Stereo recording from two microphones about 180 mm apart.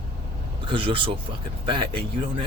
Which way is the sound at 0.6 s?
30° right (ahead or behind).